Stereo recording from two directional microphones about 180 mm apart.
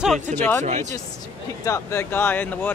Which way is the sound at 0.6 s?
40° right (ahead or behind).